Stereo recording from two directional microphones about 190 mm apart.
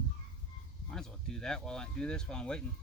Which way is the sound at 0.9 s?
5° left (ahead or behind).